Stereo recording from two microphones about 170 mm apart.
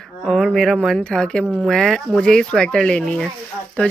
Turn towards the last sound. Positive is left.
turn(degrees=10)  # may be behind; listen again after turning